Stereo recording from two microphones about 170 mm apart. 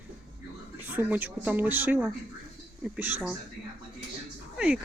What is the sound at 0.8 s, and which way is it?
Speech, 10° right (ahead or behind).